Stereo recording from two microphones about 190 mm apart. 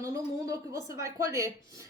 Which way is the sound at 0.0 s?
15° right (ahead or behind).